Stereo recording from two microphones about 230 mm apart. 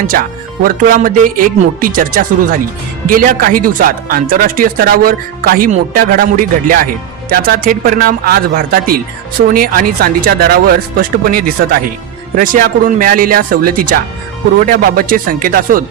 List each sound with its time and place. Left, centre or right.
0.1 s speech: right